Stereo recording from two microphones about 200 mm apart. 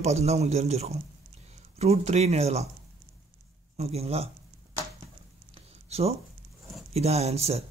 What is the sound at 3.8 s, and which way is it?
Speech, 30° right (ahead or behind).